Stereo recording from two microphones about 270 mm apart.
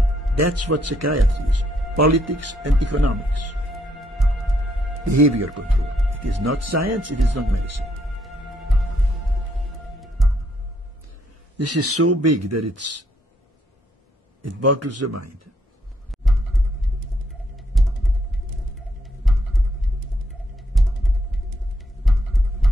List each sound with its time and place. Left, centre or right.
0.4 s speech: right
3.7 s music: centre
5.0 s speech: right
6.0 s speech: right
7.8 s music: centre
11.5 s speech: right
14.6 s speech: right
16.1 s music: centre
22.0 s heart sounds: centre